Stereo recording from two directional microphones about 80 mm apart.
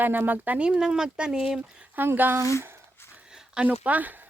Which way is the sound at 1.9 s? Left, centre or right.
Right.